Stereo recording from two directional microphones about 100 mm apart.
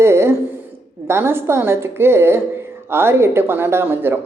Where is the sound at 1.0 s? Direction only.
25° right (ahead or behind).